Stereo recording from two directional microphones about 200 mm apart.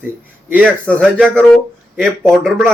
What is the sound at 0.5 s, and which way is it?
Speech, 10° right (ahead or behind).